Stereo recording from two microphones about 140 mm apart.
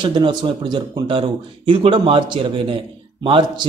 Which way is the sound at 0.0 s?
30° right (ahead or behind).